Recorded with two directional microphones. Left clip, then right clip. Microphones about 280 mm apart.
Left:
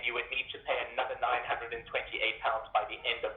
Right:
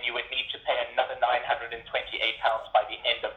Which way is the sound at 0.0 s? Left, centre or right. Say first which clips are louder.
Right 4 dB; right.